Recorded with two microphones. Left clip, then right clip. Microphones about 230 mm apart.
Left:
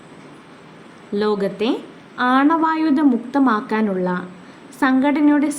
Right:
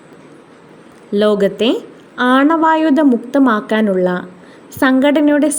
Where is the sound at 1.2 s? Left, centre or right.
Right.